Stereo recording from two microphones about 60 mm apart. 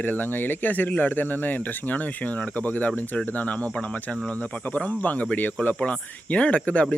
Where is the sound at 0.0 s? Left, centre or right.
Left.